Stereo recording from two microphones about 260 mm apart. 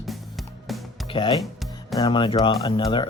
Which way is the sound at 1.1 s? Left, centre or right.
Centre.